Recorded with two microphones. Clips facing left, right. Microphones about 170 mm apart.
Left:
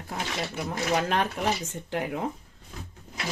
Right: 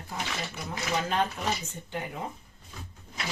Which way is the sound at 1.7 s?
85° left.